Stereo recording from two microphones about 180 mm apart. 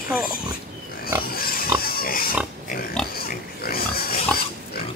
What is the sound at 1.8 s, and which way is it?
Pig, 55° left (ahead or behind).